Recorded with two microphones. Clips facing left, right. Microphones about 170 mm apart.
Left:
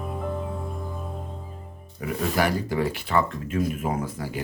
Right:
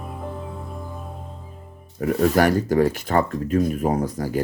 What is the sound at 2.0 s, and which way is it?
Speech, 45° right (ahead or behind).